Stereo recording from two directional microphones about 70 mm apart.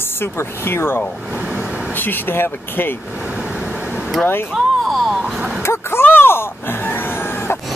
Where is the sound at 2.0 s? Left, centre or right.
Left.